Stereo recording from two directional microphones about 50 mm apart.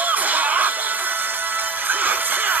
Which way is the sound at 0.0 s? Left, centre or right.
Right.